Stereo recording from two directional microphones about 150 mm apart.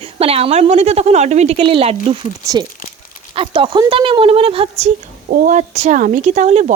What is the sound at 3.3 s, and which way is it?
A woman's voice, 35° right (ahead or behind).